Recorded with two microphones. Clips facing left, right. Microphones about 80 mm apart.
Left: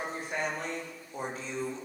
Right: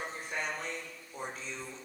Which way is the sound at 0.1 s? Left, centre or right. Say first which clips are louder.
Left 4 dB; left.